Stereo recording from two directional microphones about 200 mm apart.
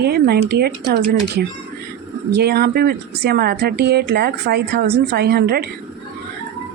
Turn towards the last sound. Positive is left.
turn(degrees=-50)  # may be behind; listen again after turning